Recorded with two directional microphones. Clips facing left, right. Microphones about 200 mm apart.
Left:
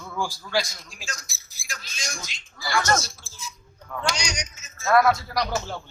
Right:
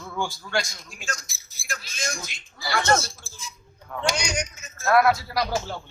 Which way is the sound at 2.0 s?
55° right (ahead or behind).